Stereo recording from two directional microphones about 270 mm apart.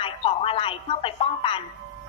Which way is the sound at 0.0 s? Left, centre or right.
Centre.